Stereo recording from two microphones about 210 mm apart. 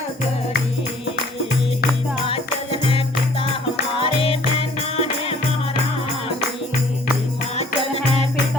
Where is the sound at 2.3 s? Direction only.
25° left (ahead or behind).